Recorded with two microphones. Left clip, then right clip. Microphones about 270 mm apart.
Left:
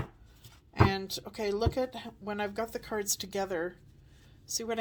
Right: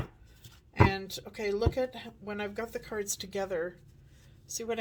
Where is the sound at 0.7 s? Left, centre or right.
Left.